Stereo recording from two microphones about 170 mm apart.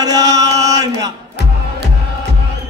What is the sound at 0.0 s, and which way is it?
Chant, 20° right (ahead or behind).